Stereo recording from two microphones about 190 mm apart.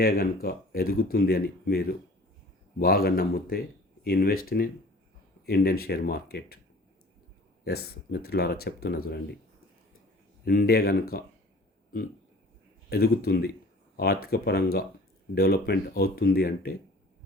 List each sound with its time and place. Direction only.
0.0 s speech: 50° left (ahead or behind)
7.6 s speech: 55° left (ahead or behind)
10.4 s speech: 55° left (ahead or behind)
12.9 s speech: 55° left (ahead or behind)